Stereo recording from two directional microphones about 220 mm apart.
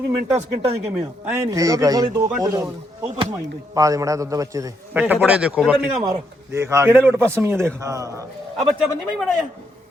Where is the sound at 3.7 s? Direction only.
15° right (ahead or behind).